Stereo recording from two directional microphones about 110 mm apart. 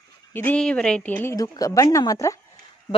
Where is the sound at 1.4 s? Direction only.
35° left (ahead or behind).